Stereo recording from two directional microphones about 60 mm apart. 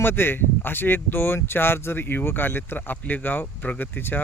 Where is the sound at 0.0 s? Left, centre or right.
Left.